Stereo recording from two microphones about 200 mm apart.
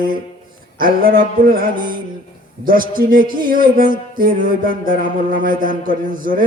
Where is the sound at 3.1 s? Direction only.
45° right (ahead or behind).